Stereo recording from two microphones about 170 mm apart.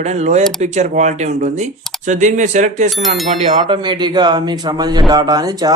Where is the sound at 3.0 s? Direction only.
Centre (ahead or behind).